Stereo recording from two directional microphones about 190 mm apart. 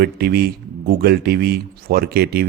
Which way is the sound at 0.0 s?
55° right (ahead or behind).